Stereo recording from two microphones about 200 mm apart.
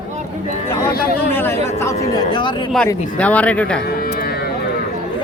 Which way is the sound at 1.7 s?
15° left (ahead or behind).